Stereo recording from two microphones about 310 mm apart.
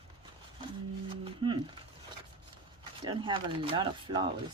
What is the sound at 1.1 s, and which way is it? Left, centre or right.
Music, centre.